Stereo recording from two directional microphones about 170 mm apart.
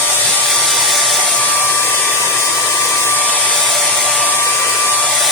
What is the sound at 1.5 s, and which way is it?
Hair dryer, 10° left (ahead or behind).